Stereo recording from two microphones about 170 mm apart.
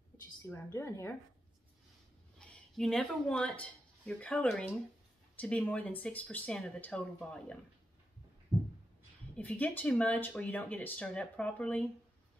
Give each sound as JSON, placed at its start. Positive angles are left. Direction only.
{"t": 0.4, "sound": "speech", "side_deg": 15}
{"t": 2.3, "sound": "speech", "side_deg": 5}
{"t": 9.4, "sound": "speech", "side_deg": 10}